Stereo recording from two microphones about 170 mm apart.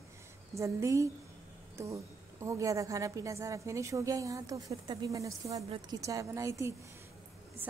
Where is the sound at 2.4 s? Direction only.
20° right (ahead or behind).